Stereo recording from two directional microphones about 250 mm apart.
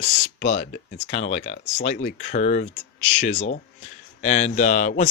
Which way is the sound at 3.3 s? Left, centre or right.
Left.